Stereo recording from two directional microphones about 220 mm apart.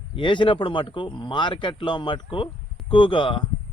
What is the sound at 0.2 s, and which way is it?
Speech, 20° left (ahead or behind).